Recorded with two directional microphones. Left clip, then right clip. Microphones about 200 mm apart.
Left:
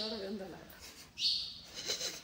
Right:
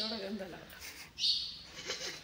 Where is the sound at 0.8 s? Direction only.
10° left (ahead or behind).